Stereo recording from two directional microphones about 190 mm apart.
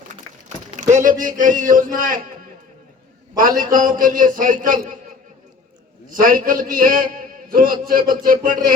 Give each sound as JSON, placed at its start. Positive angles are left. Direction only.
{"t": 0.8, "sound": "a man's voice", "side_deg": -40}
{"t": 3.3, "sound": "a man's voice", "side_deg": -45}
{"t": 6.1, "sound": "a man's voice", "side_deg": -45}